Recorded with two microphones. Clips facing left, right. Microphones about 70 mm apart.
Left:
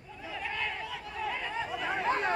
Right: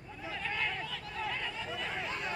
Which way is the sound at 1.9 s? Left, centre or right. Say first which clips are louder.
Left 12 dB; left.